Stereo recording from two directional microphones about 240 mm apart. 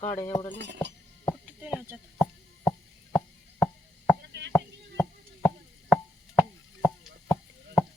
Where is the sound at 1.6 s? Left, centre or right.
Centre.